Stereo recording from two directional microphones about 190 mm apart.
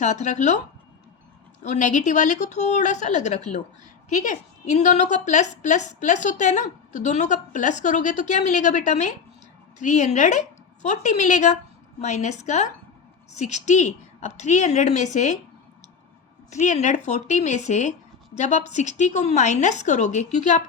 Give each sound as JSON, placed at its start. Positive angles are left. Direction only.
{"t": 0.0, "sound": "a woman's voice", "side_deg": 40}
{"t": 1.6, "sound": "a woman's voice", "side_deg": 40}
{"t": 16.5, "sound": "a woman's voice", "side_deg": 40}